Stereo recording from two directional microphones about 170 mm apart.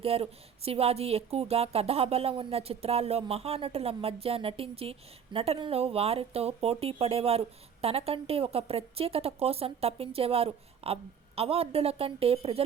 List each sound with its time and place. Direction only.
0.0 s speech: 35° right (ahead or behind)